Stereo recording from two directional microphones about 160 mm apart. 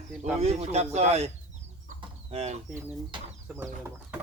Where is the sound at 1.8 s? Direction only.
40° right (ahead or behind).